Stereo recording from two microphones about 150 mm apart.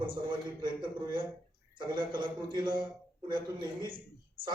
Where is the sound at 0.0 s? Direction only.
30° right (ahead or behind).